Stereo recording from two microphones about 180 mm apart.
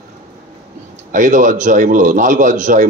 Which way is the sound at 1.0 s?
45° right (ahead or behind).